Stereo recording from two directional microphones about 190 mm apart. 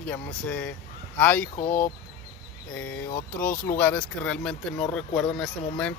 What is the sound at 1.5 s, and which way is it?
Speech, 45° left (ahead or behind).